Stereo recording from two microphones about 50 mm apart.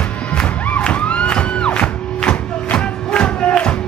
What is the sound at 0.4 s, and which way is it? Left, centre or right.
Music, left.